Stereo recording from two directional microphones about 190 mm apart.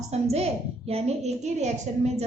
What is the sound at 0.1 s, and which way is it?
A woman's voice, 35° right (ahead or behind).